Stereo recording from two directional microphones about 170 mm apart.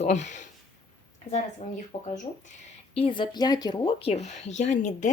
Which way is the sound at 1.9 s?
35° left (ahead or behind).